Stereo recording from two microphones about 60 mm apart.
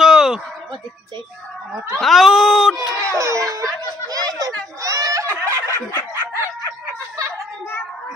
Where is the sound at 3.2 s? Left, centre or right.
Right.